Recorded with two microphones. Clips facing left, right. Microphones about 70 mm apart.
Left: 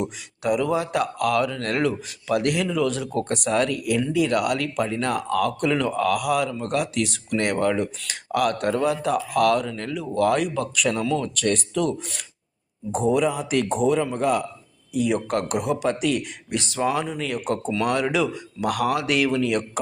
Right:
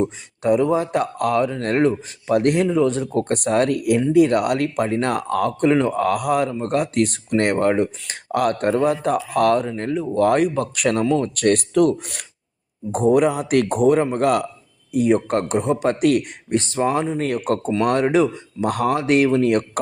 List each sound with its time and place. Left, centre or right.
0.0 s speech: right
11.0 s speech: right
11.3 s a man's voice: right
14.9 s speech: right
15.8 s a man's voice: right
16.5 s speech: right